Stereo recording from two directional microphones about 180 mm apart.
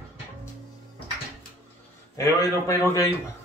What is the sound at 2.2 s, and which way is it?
Speech, 15° left (ahead or behind).